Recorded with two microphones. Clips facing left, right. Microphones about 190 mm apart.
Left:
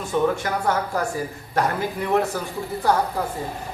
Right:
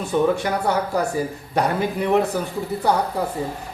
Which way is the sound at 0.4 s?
15° right (ahead or behind).